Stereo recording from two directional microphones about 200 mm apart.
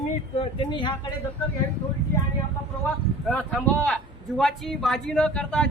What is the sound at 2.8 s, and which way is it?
Speech, 5° left (ahead or behind).